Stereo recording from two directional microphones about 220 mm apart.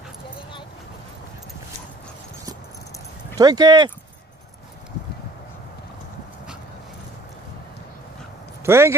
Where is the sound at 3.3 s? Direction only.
15° right (ahead or behind).